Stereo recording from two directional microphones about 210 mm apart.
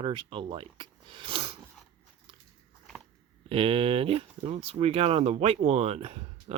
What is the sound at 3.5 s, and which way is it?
Speech, 25° right (ahead or behind).